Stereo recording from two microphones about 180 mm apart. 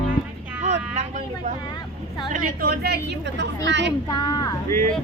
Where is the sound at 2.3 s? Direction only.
50° right (ahead or behind).